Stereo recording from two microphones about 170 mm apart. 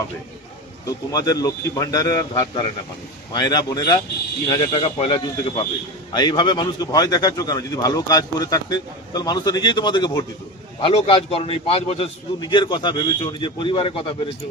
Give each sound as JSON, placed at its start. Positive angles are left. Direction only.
{"t": 0.9, "sound": "a man's voice", "side_deg": 20}